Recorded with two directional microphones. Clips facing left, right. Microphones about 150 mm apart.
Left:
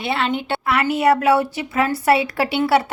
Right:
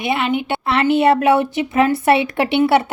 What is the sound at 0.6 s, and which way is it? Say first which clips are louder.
A woman's voice: right 3 dB; 25° right (ahead or behind).